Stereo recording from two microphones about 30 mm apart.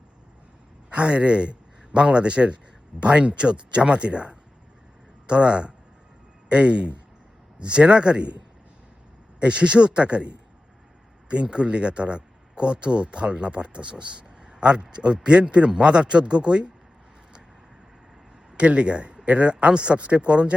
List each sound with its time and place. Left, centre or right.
0.9 s a man's voice: right
9.4 s speech: right
11.5 s speech: right
18.5 s speech: right